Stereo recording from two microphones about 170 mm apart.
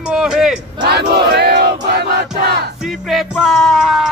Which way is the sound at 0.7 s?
75° right (ahead or behind).